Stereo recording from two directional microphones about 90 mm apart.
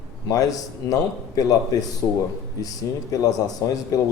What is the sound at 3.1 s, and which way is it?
Speech, 40° left (ahead or behind).